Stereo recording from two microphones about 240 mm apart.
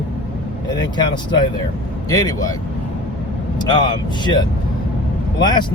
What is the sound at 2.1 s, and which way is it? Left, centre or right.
Speech, centre.